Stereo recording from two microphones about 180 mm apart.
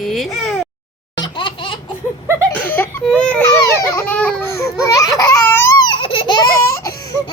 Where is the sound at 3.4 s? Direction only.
20° left (ahead or behind).